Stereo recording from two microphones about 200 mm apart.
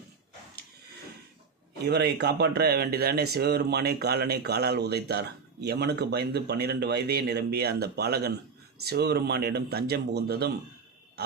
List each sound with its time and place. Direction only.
1.8 s speech: 55° right (ahead or behind)